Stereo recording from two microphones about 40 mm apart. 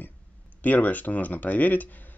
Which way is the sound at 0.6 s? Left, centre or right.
Left.